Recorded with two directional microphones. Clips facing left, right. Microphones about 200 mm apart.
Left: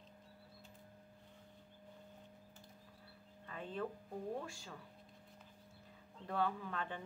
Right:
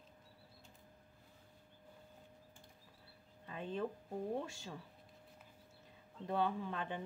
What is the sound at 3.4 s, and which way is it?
A woman's voice, 20° right (ahead or behind).